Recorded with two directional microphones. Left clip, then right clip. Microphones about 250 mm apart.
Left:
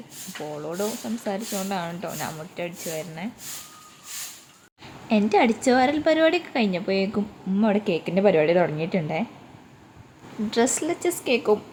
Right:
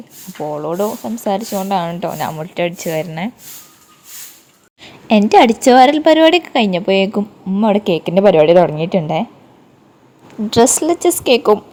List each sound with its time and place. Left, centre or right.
0.4 s speech: right
4.8 s speech: right
10.5 s speech: right